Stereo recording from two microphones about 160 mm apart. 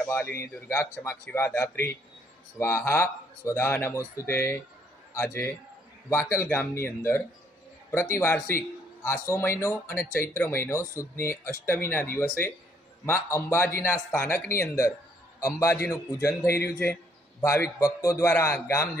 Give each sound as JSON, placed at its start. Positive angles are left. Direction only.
{"t": 0.0, "sound": "a man's voice", "side_deg": 10}
{"t": 15.4, "sound": "a man's voice", "side_deg": 15}